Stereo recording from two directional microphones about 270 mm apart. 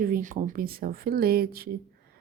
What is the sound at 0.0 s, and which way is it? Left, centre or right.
A woman's voice, right.